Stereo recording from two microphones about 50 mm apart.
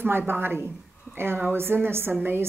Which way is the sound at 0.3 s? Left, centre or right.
Right.